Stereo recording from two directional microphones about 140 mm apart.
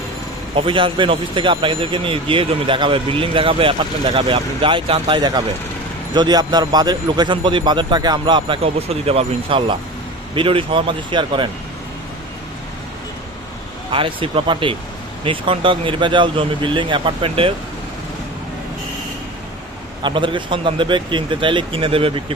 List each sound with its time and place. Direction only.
0.5 s speech: 40° right (ahead or behind)
13.9 s speech: 40° right (ahead or behind)
20.0 s speech: 35° right (ahead or behind)